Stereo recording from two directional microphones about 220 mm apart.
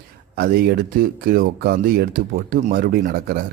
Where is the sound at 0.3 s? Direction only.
40° right (ahead or behind).